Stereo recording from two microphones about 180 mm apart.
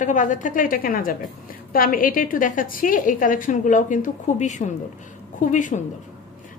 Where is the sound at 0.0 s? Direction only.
45° left (ahead or behind).